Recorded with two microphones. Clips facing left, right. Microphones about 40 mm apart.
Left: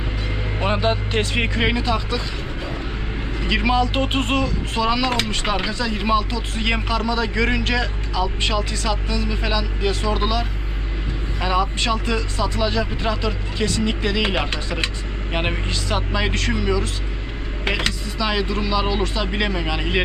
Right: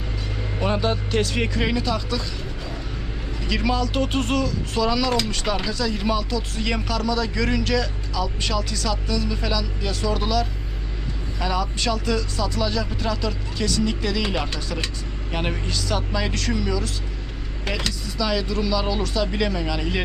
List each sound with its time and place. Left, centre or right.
0.6 s speech: left
3.4 s speech: left